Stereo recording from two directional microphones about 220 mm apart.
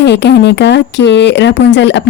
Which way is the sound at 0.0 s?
50° left (ahead or behind).